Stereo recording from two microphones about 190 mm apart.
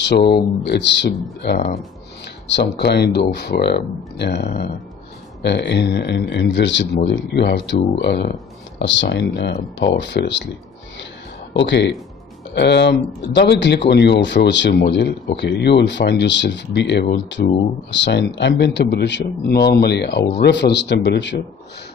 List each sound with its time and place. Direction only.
0.0 s speech: 60° left (ahead or behind)
2.8 s speech: 60° left (ahead or behind)
11.5 s speech: 70° left (ahead or behind)
17.4 s speech: 45° left (ahead or behind)
17.9 s speech: 70° left (ahead or behind)